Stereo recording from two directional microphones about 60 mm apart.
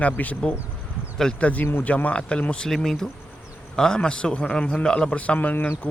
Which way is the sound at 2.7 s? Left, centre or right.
Centre.